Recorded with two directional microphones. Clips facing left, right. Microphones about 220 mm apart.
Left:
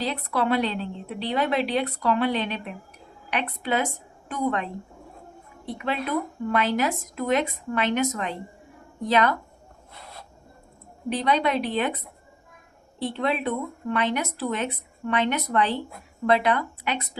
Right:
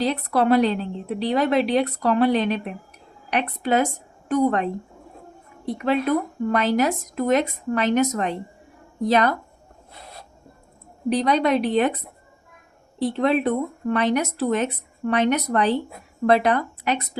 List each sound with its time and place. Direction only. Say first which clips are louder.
0.0 s a woman's voice: right 5 dB; 40° right (ahead or behind)
5.7 s a woman's voice: right 6 dB; 40° right (ahead or behind)
11.1 s a woman's voice: right 4 dB; 40° right (ahead or behind)
13.1 s a woman's voice: right 6 dB; 45° right (ahead or behind)